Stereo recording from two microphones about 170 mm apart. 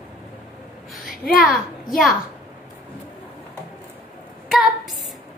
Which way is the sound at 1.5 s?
Centre (ahead or behind).